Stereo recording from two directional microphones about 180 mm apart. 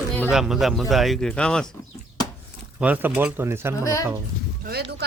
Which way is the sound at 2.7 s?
10° right (ahead or behind).